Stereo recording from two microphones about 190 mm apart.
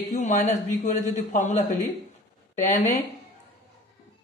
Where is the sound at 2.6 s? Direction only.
40° left (ahead or behind).